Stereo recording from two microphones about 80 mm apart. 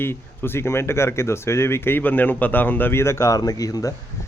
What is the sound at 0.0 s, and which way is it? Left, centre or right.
A man's voice, left.